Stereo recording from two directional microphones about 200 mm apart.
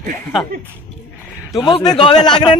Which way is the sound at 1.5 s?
15° left (ahead or behind).